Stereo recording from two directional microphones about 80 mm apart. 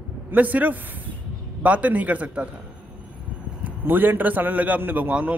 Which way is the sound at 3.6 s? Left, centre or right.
Right.